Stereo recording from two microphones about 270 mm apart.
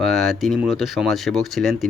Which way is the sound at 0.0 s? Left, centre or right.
Centre.